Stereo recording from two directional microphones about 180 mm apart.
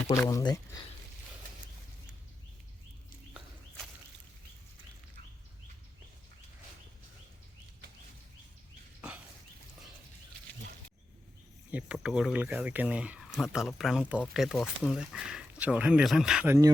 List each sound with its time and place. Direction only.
0.3 s speech: 20° left (ahead or behind)
9.0 s a sound: 10° right (ahead or behind)
11.7 s speech: 5° right (ahead or behind)